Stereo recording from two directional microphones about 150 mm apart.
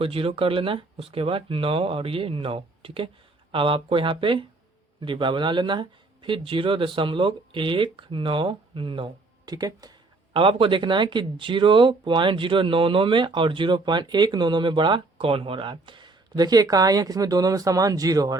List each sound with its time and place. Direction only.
0.0 s speech: 40° right (ahead or behind)